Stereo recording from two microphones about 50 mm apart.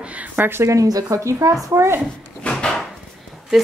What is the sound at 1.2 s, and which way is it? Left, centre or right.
Speech, right.